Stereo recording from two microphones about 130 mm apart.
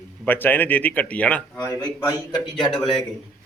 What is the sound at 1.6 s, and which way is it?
Speech, 25° left (ahead or behind).